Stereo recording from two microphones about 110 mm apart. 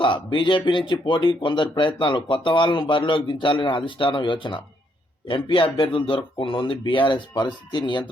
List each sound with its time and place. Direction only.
0.0 s speech: 50° left (ahead or behind)